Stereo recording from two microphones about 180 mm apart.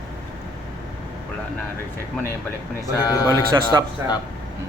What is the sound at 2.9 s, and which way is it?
Speech, 20° left (ahead or behind).